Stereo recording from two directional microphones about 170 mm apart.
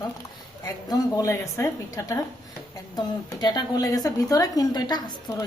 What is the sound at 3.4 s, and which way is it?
A woman's voice, 25° left (ahead or behind).